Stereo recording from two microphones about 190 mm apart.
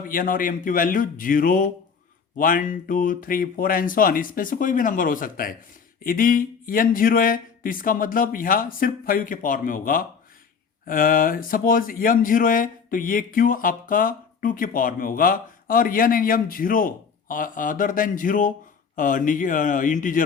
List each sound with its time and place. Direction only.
0.1 s speech: 45° left (ahead or behind)